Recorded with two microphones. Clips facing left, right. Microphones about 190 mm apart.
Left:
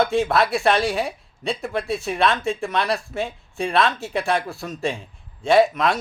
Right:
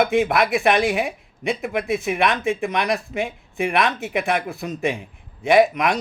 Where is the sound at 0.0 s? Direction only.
15° right (ahead or behind).